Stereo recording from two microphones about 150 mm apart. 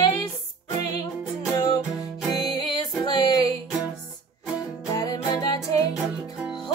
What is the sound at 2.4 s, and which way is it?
Music, 30° left (ahead or behind).